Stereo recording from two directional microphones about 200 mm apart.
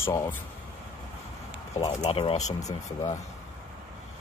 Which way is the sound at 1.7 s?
25° left (ahead or behind).